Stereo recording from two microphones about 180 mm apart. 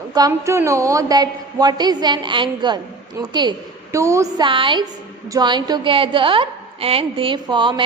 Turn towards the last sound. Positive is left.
turn(degrees=-25)  # may be behind; listen again after turning